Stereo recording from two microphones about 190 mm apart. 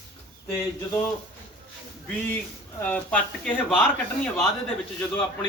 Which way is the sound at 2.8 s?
5° left (ahead or behind).